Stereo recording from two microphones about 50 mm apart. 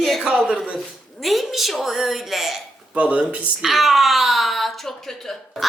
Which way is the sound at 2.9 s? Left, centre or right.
Right.